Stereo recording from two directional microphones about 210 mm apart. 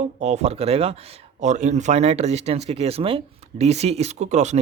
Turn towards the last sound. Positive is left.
turn(degrees=-35)  # may be behind; listen again after turning